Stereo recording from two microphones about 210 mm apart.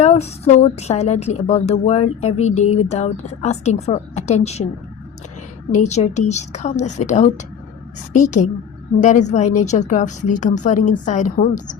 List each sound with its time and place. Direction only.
0.0 s speech: 30° left (ahead or behind)
5.7 s speech: 35° left (ahead or behind)